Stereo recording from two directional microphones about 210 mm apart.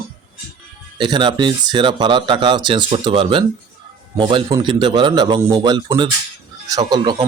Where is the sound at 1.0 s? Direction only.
20° right (ahead or behind).